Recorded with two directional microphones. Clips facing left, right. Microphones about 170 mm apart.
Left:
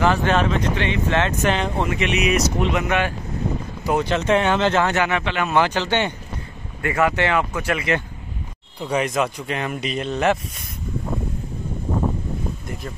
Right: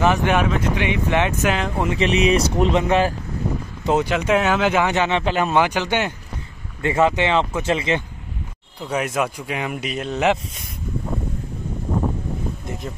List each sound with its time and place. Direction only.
0.0 s speech: 15° right (ahead or behind)
1.4 s speech: 5° right (ahead or behind)
1.9 s speech: 30° right (ahead or behind)
3.8 s speech: 20° right (ahead or behind)
4.1 s speech: 10° right (ahead or behind)
5.2 s speech: 40° right (ahead or behind)
5.5 s speech: 15° right (ahead or behind)
6.8 s speech: 25° right (ahead or behind)
8.8 s speech: 5° right (ahead or behind)